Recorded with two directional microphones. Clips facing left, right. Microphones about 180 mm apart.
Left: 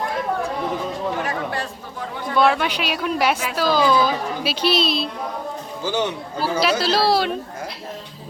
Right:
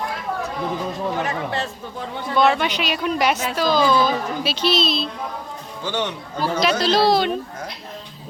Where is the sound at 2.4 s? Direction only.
5° left (ahead or behind).